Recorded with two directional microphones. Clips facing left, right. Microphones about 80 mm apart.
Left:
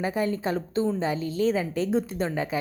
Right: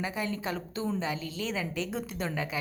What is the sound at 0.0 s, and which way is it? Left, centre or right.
A woman's voice, left.